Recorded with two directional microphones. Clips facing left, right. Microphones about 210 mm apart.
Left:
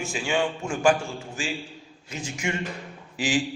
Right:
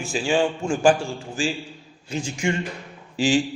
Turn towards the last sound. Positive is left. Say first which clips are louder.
# right 5 dB
turn(degrees=-30)  # may be behind; listen again after turning